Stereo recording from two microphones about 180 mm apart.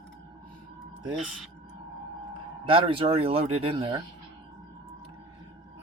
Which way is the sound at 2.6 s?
30° right (ahead or behind).